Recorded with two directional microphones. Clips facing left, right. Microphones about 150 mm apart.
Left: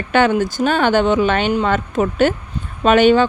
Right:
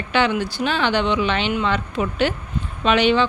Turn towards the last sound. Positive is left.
turn(degrees=45)  # may be behind; listen again after turning